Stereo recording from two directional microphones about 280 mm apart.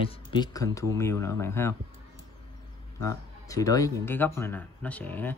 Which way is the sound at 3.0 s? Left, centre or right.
Centre.